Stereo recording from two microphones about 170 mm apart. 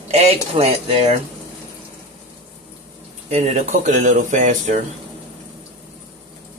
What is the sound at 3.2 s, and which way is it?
Speech, 40° right (ahead or behind).